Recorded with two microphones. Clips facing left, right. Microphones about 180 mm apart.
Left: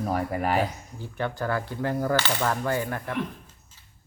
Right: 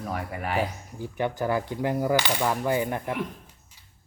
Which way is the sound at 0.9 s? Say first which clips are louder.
Right 3 dB; 15° right (ahead or behind).